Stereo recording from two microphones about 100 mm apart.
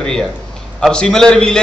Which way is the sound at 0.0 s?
5° left (ahead or behind).